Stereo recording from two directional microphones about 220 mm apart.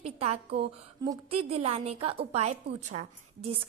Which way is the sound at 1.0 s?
15° right (ahead or behind).